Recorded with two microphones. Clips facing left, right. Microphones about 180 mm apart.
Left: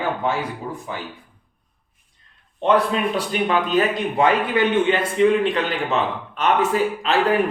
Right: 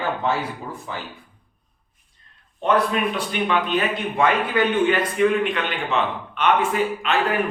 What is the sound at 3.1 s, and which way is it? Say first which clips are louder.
A man's voice: left 2 dB; 40° left (ahead or behind).